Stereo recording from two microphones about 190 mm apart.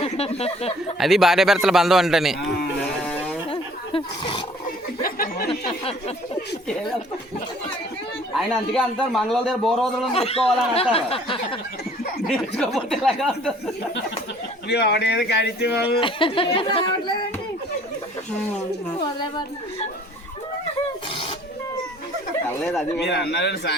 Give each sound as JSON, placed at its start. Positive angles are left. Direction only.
{"t": 0.0, "sound": "speech", "side_deg": 30}
{"t": 0.9, "sound": "a man's voice", "side_deg": 0}
{"t": 3.0, "sound": "a sound", "side_deg": 5}
{"t": 3.5, "sound": "roaring cats", "side_deg": 30}
{"t": 5.0, "sound": "speech", "side_deg": 50}
{"t": 5.5, "sound": "speech", "side_deg": 30}
{"t": 8.4, "sound": "a man's voice", "side_deg": 0}
{"t": 10.1, "sound": "speech", "side_deg": 30}
{"t": 12.3, "sound": "a man's voice", "side_deg": 0}
{"t": 14.7, "sound": "speech", "side_deg": 60}
{"t": 16.0, "sound": "speech", "side_deg": 25}
{"t": 22.4, "sound": "a man's voice", "side_deg": 5}
{"t": 23.0, "sound": "speech", "side_deg": 60}